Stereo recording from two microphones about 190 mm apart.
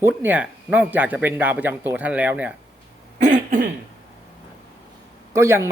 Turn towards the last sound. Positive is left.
turn(degrees=-15)  # may be behind; listen again after turning